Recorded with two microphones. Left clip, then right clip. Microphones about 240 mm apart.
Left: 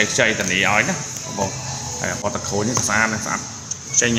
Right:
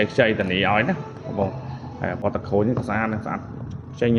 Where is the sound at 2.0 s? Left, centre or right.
Centre.